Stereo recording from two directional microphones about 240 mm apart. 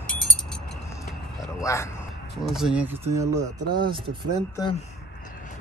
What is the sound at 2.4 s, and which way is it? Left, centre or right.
Speech, centre.